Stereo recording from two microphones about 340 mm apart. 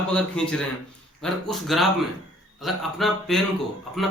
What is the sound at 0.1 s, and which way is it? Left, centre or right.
A man's voice, centre.